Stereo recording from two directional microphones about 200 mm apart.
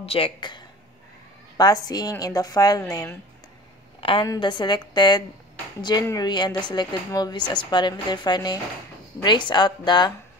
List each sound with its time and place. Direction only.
0.0 s a woman's voice: 30° left (ahead or behind)